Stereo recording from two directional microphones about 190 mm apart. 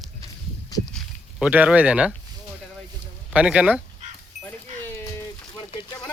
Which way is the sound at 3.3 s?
5° right (ahead or behind).